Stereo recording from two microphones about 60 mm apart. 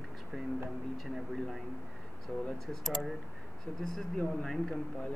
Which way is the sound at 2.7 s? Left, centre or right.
Centre.